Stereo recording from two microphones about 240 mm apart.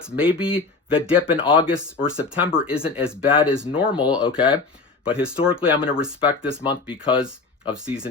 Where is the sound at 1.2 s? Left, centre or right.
Left.